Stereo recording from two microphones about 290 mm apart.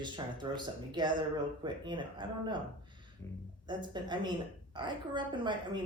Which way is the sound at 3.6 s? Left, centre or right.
Centre.